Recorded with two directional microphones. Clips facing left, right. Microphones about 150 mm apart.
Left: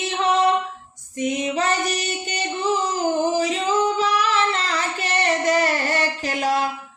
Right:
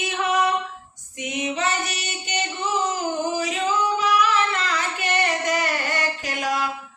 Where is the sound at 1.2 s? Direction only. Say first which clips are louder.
Left 4 dB; 40° left (ahead or behind).